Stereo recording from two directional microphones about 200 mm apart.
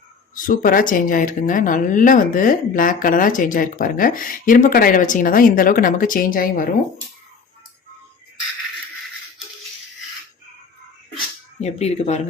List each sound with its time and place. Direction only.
0.4 s speech: 45° left (ahead or behind)
11.6 s speech: 30° left (ahead or behind)